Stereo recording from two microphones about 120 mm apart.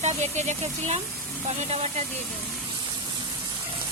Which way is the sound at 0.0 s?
75° right (ahead or behind).